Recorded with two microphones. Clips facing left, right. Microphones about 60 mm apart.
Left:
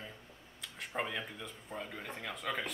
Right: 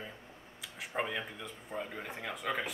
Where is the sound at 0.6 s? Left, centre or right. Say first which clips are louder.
Right 2 dB; centre.